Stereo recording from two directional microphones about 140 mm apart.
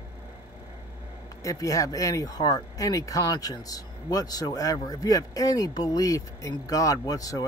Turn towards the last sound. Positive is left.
turn(degrees=25)  # may be behind; listen again after turning